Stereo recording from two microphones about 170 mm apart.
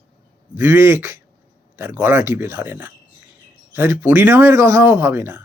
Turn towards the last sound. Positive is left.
turn(degrees=-15)  # may be behind; listen again after turning